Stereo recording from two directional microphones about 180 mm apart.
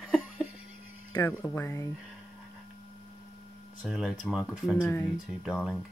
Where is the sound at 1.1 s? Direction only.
15° left (ahead or behind).